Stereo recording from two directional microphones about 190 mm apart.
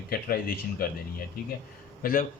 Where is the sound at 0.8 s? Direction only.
50° left (ahead or behind).